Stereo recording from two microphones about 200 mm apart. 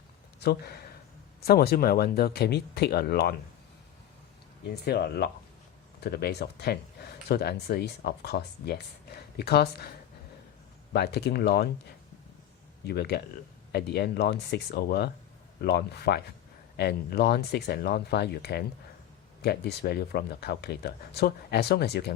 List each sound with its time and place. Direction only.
0.3 s speech: 55° left (ahead or behind)
4.9 s speech: 50° left (ahead or behind)
10.9 s speech: 55° left (ahead or behind)
12.8 s speech: 55° left (ahead or behind)